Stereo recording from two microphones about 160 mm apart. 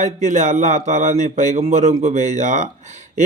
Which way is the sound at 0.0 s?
50° right (ahead or behind).